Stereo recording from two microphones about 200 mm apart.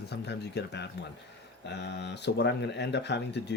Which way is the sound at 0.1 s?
55° left (ahead or behind).